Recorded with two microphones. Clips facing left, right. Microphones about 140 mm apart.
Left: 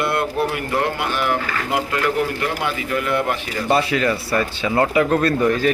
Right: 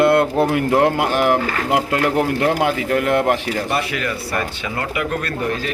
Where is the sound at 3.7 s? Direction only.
30° left (ahead or behind).